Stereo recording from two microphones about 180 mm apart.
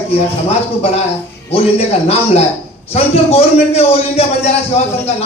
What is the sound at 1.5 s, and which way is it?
Speech, 35° left (ahead or behind).